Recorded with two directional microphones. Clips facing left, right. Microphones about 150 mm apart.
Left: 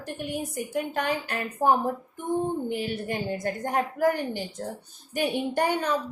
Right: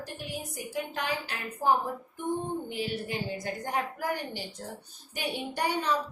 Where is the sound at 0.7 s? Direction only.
55° left (ahead or behind).